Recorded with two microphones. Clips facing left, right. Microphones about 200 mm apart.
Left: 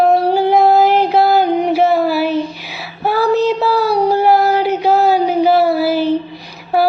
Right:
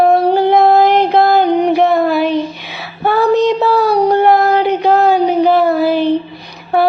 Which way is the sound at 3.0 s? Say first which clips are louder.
Right 2 dB; 5° left (ahead or behind).